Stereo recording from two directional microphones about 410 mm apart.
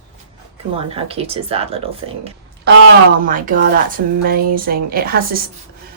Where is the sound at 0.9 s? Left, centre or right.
Centre.